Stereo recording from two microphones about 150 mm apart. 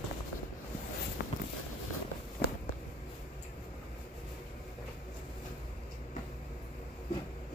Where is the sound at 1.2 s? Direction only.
90° left.